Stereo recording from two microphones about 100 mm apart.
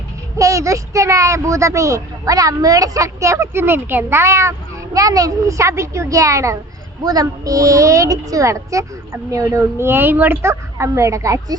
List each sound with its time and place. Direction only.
0.3 s a child's voice: 30° right (ahead or behind)